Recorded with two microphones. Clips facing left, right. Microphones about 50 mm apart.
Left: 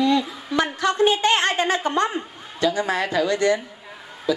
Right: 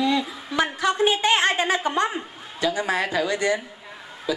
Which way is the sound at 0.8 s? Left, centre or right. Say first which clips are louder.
Left 2 dB; centre.